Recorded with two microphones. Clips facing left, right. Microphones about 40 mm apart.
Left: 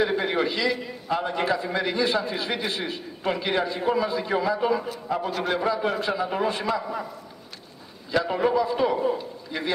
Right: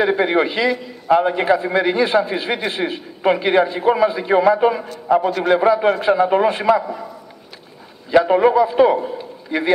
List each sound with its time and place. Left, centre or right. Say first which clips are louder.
0.0 s a man's voice: right 7 dB; right
8.1 s a man's voice: right 10 dB; right